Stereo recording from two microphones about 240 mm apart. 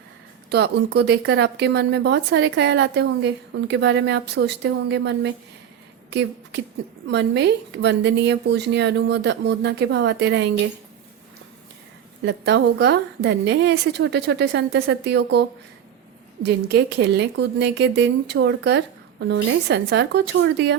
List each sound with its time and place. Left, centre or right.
0.5 s speech: right
12.2 s speech: right